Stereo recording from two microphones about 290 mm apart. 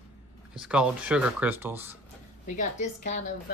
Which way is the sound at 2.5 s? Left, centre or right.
Left.